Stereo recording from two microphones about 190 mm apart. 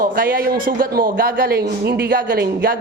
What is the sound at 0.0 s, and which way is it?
A man's voice, 50° right (ahead or behind).